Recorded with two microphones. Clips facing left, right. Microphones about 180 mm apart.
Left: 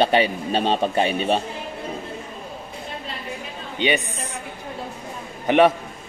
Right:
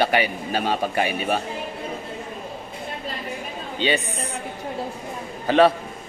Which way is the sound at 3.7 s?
15° left (ahead or behind).